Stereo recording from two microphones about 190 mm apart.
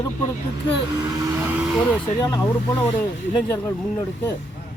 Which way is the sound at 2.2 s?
20° left (ahead or behind).